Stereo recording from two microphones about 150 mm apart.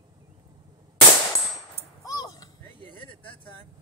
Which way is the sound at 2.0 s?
25° left (ahead or behind).